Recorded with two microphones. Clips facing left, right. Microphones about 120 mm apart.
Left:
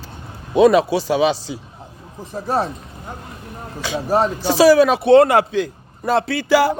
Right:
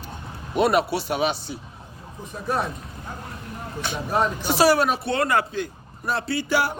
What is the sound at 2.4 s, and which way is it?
Speech, 30° left (ahead or behind).